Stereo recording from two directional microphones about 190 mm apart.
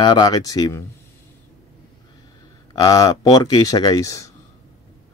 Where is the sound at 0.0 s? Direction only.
25° left (ahead or behind).